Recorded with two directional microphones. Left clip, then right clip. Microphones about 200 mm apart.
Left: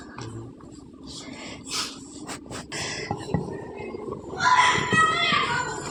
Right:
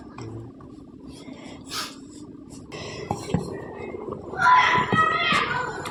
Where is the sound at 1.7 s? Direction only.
60° right (ahead or behind).